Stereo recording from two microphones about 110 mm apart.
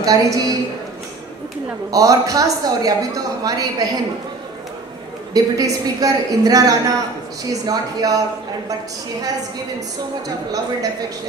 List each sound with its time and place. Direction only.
0.0 s a woman's voice: 30° right (ahead or behind)
1.9 s a woman's voice: 30° right (ahead or behind)
5.3 s a woman's voice: 35° right (ahead or behind)
10.2 s a woman's voice: 35° right (ahead or behind)